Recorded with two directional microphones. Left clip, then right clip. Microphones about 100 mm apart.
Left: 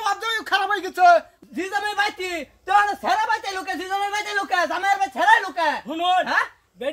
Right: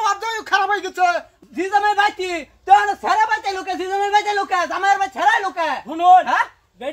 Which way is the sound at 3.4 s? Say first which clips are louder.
Right 4 dB; 35° left (ahead or behind).